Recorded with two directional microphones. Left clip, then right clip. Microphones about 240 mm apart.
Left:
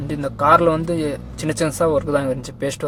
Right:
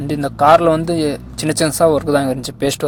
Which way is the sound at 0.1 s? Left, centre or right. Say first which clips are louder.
Right 4 dB; centre.